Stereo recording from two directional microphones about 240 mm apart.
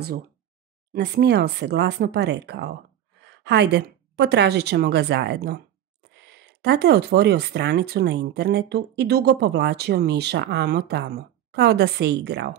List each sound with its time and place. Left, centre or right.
0.9 s a woman's voice: right